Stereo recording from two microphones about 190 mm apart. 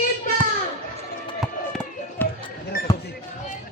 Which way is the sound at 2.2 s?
10° left (ahead or behind).